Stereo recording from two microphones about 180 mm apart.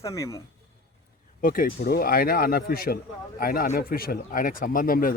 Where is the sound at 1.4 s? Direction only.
55° left (ahead or behind).